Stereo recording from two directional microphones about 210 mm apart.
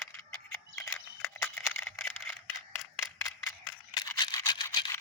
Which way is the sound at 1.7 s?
10° left (ahead or behind).